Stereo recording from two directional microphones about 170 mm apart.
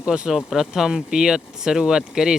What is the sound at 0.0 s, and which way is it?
Speech, 5° right (ahead or behind).